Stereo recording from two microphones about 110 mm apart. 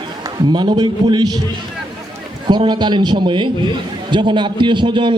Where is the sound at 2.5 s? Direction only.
45° right (ahead or behind).